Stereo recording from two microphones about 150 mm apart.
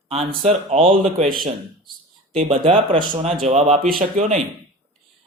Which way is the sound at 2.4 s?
40° right (ahead or behind).